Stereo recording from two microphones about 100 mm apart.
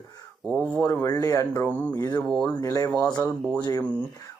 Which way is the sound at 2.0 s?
40° left (ahead or behind).